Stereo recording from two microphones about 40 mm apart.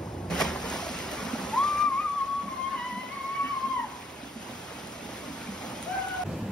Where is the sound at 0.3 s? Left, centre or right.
Centre.